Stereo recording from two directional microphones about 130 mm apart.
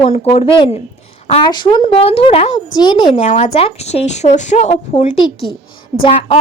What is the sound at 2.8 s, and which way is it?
Speech, 35° left (ahead or behind).